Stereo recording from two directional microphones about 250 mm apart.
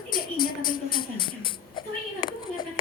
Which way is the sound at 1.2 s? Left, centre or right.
Centre.